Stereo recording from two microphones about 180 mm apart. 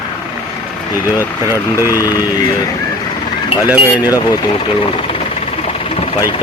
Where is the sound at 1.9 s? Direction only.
20° left (ahead or behind).